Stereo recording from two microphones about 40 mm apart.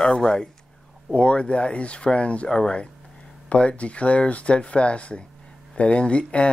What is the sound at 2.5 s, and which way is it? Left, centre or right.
Speech, centre.